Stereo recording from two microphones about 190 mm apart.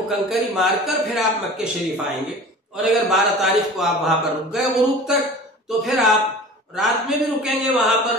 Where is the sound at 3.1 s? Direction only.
Centre (ahead or behind).